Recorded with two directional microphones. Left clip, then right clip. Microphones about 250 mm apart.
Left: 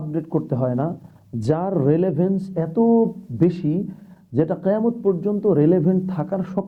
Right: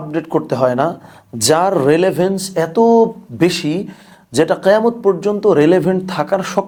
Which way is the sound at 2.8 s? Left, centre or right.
Right.